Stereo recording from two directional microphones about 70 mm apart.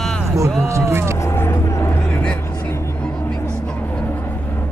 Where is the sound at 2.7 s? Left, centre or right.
Left.